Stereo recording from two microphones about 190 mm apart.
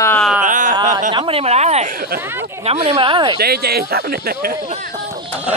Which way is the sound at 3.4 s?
55° right (ahead or behind).